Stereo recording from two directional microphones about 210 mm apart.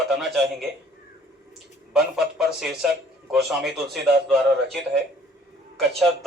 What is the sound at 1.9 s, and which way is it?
A man's voice, centre (ahead or behind).